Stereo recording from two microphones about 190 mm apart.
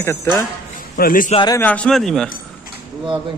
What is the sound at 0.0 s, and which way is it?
Speech, 15° left (ahead or behind).